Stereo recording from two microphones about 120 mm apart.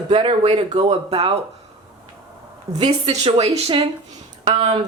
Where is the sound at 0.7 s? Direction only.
65° right (ahead or behind).